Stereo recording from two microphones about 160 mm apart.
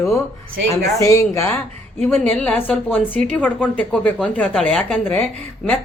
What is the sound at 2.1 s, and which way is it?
A woman's voice, 5° left (ahead or behind).